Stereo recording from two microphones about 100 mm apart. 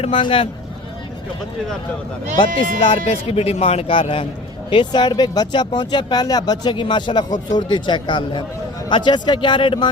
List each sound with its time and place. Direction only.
0.0 s a man's voice: 65° left (ahead or behind)
2.9 s speech: 80° left
3.9 s a man's voice: 70° left (ahead or behind)
4.7 s speech: 50° left (ahead or behind)